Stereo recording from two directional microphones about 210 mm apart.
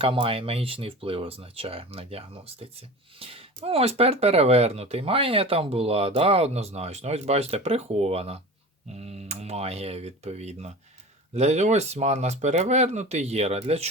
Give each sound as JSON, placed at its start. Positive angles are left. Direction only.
{"t": 0.0, "sound": "speech", "side_deg": -25}